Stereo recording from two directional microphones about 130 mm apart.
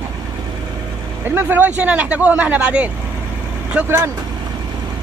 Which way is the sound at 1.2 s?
15° right (ahead or behind).